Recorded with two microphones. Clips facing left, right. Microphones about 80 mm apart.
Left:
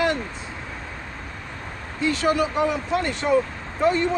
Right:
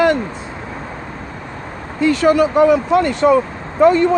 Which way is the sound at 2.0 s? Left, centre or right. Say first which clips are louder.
Right 8 dB; right.